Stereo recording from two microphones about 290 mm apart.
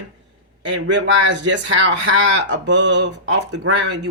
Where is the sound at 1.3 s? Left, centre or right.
Right.